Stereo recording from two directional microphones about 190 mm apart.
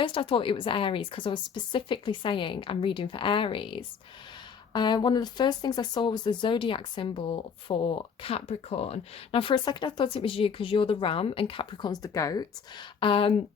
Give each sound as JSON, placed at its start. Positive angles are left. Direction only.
{"t": 0.0, "sound": "speech", "side_deg": 25}